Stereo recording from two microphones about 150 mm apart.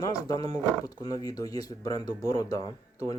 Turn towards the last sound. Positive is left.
turn(degrees=25)  # may be behind; listen again after turning